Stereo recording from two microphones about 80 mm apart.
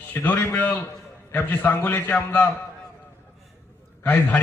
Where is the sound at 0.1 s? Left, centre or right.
Centre.